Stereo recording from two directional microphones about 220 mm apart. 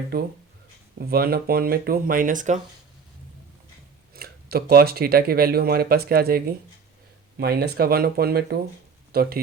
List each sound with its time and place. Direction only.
0.9 s speech: 45° right (ahead or behind)
4.1 s speech: 45° right (ahead or behind)